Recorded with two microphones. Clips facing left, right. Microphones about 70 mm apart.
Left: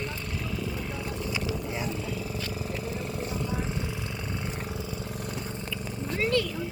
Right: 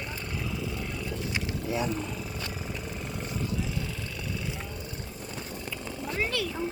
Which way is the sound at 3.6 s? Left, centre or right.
Left.